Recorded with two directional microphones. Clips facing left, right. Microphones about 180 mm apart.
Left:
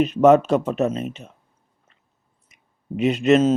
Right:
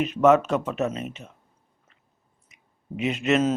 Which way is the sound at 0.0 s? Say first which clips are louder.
Left 4 dB; 35° left (ahead or behind).